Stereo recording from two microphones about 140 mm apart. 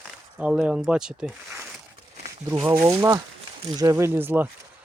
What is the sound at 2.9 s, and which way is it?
Speech, 20° right (ahead or behind).